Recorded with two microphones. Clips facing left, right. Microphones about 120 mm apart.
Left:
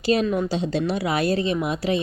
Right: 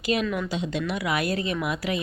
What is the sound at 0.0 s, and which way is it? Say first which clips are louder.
A woman's voice: left 5 dB; 35° left (ahead or behind).